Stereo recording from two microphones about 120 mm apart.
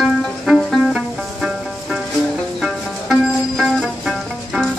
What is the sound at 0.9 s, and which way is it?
Music, 5° right (ahead or behind).